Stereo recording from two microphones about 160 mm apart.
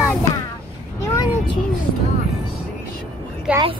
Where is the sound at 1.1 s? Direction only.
25° left (ahead or behind).